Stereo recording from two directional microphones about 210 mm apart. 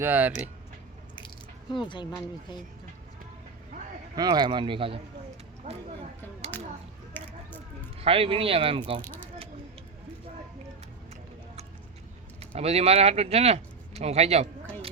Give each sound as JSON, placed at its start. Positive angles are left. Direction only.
{"t": 0.0, "sound": "speech", "side_deg": -10}
{"t": 1.7, "sound": "speech", "side_deg": 20}
{"t": 4.1, "sound": "speech", "side_deg": -20}
{"t": 6.5, "sound": "a sound", "side_deg": 10}
{"t": 7.9, "sound": "speech", "side_deg": -25}
{"t": 9.0, "sound": "a sound", "side_deg": 10}
{"t": 12.4, "sound": "speech", "side_deg": -30}